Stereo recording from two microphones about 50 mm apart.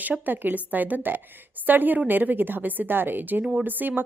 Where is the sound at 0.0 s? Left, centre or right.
Right.